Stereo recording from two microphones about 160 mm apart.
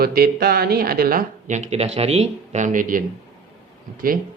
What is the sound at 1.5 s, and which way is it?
Speech, 45° right (ahead or behind).